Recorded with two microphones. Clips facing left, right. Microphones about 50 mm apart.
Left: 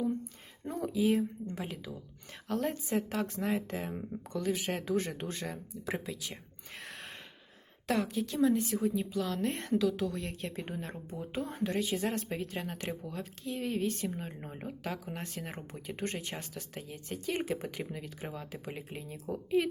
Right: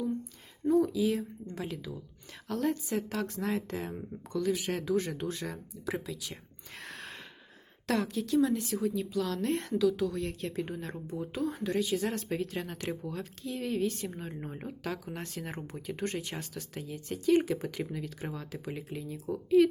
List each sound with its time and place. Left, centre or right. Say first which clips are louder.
0.6 s a sound: right 11 dB; centre
0.9 s speech: left 1 dB; left
7.9 s a woman's voice: right 2 dB; centre
8.5 s a woman's voice: even; left
12.3 s speech: right 3 dB; centre; by 14.1 s left
14.4 s speech: right 2 dB; centre
14.8 s speech: right 2 dB; left